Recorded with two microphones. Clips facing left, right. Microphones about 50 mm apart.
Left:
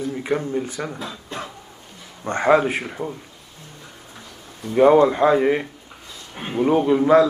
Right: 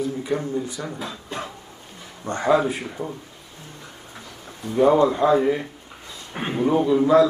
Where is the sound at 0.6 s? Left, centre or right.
Left.